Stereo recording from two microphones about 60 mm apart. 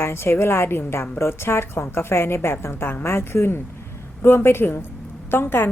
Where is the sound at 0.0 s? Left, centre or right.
Left.